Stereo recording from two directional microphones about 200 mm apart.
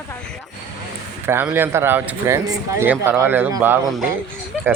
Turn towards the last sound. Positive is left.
turn(degrees=0)  # may be behind; listen again after turning